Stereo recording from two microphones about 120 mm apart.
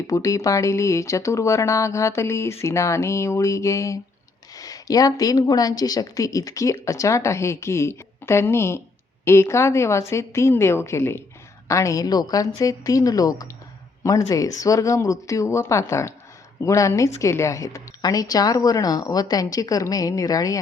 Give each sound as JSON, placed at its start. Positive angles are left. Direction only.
{"t": 0.1, "sound": "speech", "side_deg": 25}